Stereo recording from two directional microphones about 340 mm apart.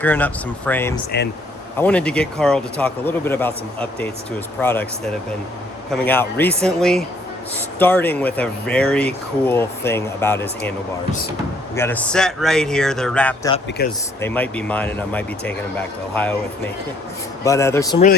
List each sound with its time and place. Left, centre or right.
0.0 s speech: centre
5.9 s speech: centre
11.7 s speech: centre
13.8 s speech: left
14.2 s speech: centre
17.4 s speech: centre